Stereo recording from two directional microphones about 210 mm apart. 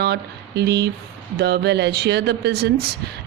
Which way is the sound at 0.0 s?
50° right (ahead or behind).